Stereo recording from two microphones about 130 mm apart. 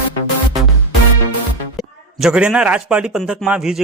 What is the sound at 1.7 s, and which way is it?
A man's voice, 5° right (ahead or behind).